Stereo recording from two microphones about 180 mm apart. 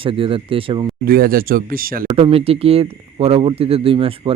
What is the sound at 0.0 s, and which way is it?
Speech, 30° right (ahead or behind).